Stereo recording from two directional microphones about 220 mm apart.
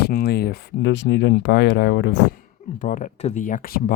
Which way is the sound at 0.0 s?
45° left (ahead or behind).